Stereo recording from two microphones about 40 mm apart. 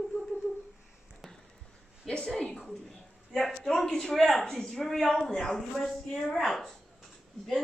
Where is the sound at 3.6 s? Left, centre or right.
Centre.